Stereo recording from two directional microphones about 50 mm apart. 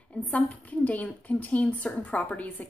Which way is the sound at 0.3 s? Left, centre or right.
Left.